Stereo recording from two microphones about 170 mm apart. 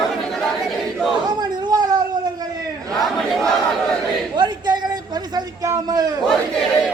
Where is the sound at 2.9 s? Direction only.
Centre (ahead or behind).